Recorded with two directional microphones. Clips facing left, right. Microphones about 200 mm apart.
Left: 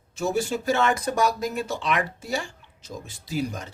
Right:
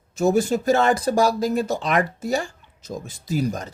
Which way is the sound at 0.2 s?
40° right (ahead or behind).